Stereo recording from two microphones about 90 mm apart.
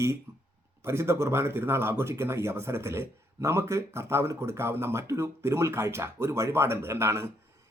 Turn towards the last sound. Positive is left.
turn(degrees=-30)  # may be behind; listen again after turning